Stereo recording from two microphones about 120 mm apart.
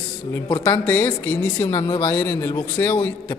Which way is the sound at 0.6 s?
15° left (ahead or behind).